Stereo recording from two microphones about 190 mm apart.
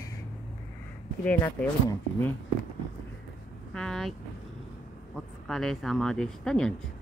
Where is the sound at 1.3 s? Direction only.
10° left (ahead or behind).